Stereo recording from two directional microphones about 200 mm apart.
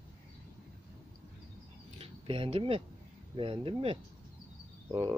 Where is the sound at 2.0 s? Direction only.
30° right (ahead or behind).